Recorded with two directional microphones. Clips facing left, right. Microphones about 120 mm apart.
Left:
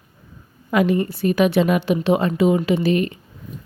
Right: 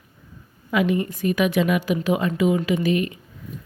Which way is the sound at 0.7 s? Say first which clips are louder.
Left 3 dB; 40° left (ahead or behind).